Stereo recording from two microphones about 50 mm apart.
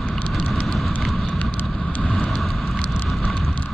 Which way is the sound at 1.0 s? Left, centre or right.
Centre.